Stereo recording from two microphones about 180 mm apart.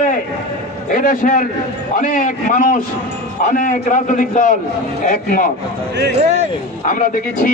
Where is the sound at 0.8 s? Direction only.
45° left (ahead or behind).